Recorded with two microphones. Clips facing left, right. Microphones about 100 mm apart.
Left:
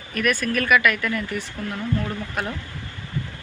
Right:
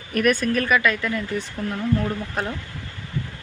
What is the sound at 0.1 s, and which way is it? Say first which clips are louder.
Speech: right 4 dB; 40° right (ahead or behind).